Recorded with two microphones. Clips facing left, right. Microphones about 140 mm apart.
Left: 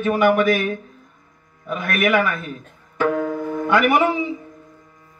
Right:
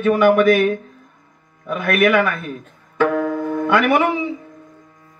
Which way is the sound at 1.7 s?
60° right (ahead or behind).